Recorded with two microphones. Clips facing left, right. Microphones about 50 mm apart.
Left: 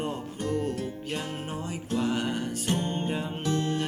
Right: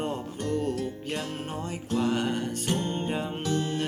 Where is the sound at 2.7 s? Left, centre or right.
Centre.